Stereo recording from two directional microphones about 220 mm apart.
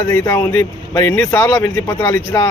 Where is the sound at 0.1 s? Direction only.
10° left (ahead or behind).